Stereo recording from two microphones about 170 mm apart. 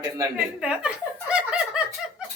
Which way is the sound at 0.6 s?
5° right (ahead or behind).